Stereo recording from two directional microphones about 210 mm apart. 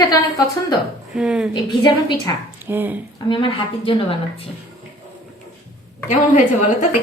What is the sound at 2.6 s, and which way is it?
Speech, 10° right (ahead or behind).